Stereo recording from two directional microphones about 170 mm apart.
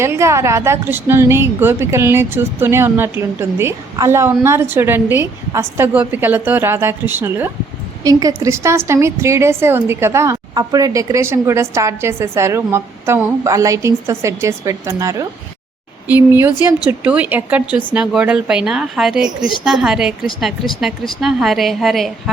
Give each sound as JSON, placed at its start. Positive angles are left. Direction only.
{"t": 0.0, "sound": "a woman's voice", "side_deg": -15}
{"t": 21.2, "sound": "a woman's voice", "side_deg": 0}